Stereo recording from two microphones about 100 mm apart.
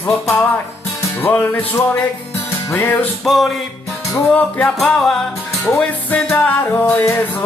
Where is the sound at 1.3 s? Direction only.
15° left (ahead or behind).